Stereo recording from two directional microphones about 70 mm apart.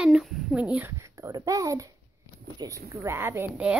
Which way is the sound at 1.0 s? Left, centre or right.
Right.